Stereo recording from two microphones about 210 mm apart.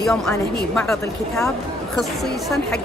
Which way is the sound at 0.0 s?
5° left (ahead or behind).